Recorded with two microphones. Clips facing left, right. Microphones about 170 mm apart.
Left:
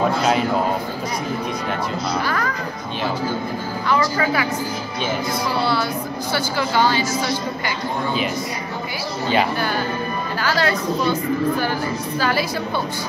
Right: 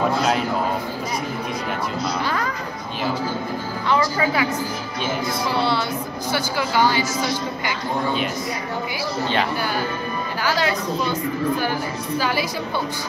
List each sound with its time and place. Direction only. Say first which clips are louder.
0.2 s a man's voice: left 2 dB; centre (ahead or behind)
3.9 s a woman's voice: even; 20° right (ahead or behind)
6.3 s speech: left 1 dB; 15° right (ahead or behind)
10.4 s speech: left 1 dB; 15° right (ahead or behind)
12.2 s speech: left 2 dB; 15° right (ahead or behind)